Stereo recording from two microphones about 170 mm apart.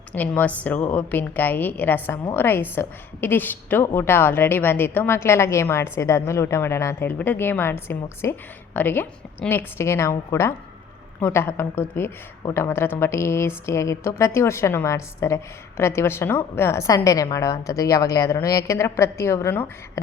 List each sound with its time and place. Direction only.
0.1 s a woman's voice: 10° left (ahead or behind)